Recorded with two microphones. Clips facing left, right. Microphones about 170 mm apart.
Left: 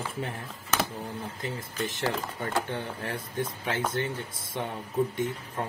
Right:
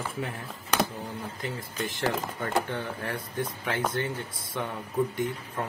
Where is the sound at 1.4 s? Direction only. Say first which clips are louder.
Left 1 dB; 20° left (ahead or behind).